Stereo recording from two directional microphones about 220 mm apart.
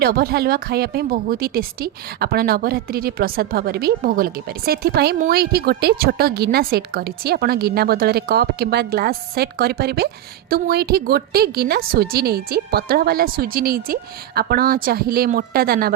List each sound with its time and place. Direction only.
0.0 s a woman's voice: 45° right (ahead or behind)